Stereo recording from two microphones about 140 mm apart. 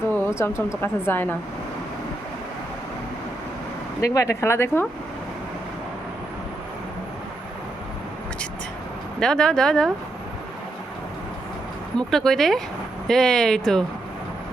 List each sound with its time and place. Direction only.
0.1 s a sound: 15° left (ahead or behind)
0.8 s a woman's voice: 15° left (ahead or behind)
4.0 s speech: 20° left (ahead or behind)
9.2 s speech: 5° left (ahead or behind)
11.9 s speech: 5° left (ahead or behind)